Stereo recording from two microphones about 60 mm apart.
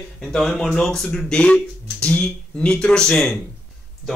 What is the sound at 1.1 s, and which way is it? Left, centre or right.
Speech, centre.